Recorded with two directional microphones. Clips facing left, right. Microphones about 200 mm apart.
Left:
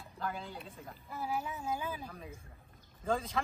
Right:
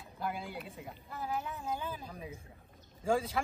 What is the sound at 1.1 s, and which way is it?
Speech, 10° left (ahead or behind).